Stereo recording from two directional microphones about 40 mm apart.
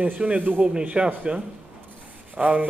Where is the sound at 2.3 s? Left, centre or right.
Right.